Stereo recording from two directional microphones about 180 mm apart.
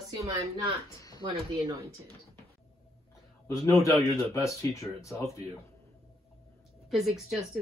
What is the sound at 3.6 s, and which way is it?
Speech, 15° left (ahead or behind).